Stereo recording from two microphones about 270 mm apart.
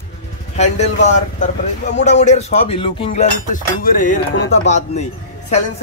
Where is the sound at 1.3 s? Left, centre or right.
Left.